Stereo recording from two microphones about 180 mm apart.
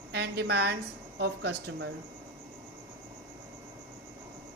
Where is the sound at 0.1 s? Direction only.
70° right (ahead or behind).